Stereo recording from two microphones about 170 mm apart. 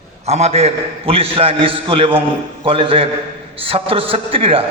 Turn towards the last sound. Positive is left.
turn(degrees=-35)  # may be behind; listen again after turning